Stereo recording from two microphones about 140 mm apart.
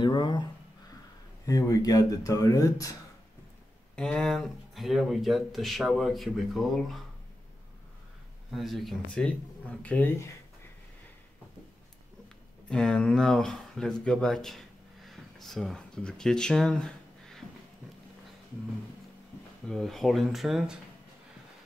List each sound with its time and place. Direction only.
0.0 s speech: 35° left (ahead or behind)
1.4 s speech: 25° left (ahead or behind)
3.9 s speech: 5° left (ahead or behind)
8.5 s speech: centre (ahead or behind); by 10.3 s 15° left (ahead or behind)
12.6 s speech: 5° left (ahead or behind)
19.7 s speech: centre (ahead or behind)